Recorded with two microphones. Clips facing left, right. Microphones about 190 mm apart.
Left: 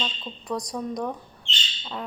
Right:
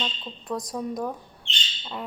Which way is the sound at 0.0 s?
Centre (ahead or behind).